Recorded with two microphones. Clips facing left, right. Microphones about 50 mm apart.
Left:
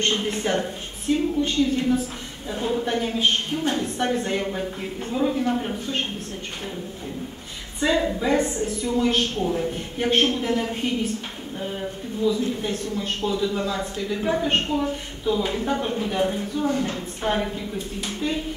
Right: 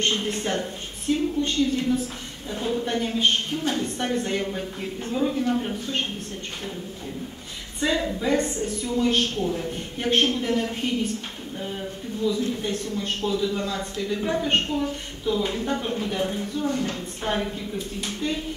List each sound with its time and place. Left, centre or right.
0.1 s a woman's voice: centre
7.8 s a man's voice: centre
16.7 s a woman's voice: centre
17.2 s a man's voice: centre